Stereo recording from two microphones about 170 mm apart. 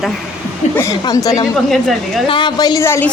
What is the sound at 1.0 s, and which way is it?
Speech, 20° left (ahead or behind).